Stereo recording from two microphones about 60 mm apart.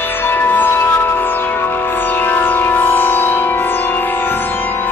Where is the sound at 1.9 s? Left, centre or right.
Left.